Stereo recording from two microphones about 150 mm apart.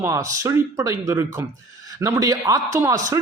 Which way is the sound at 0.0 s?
20° right (ahead or behind).